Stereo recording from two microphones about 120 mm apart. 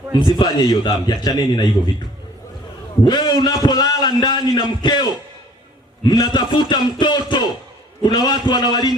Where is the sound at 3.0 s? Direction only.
35° left (ahead or behind).